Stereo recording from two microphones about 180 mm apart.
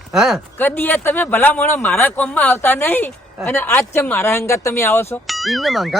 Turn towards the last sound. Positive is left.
turn(degrees=0)  # may be behind; listen again after turning